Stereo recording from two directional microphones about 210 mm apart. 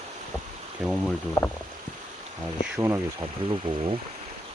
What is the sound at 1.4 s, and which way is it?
Speech, 10° left (ahead or behind).